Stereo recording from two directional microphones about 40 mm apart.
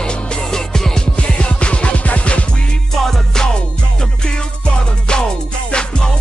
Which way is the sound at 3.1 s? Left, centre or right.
Centre.